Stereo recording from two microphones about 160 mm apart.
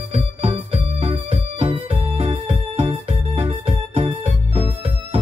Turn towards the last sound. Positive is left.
turn(degrees=-40)  # may be behind; listen again after turning